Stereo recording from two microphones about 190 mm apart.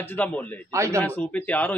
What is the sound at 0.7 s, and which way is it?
Speech, 15° right (ahead or behind).